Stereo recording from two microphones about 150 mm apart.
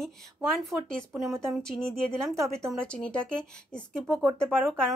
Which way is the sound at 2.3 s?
20° right (ahead or behind).